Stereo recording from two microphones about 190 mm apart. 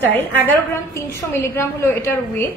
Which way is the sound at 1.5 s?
15° left (ahead or behind).